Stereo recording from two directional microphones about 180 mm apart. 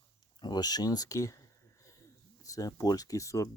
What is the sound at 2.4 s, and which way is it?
Speech, 20° left (ahead or behind).